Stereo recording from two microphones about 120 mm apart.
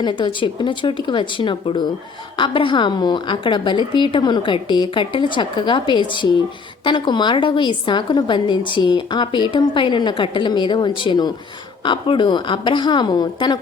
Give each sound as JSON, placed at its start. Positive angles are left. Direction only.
{"t": 0.0, "sound": "a woman's voice", "side_deg": 40}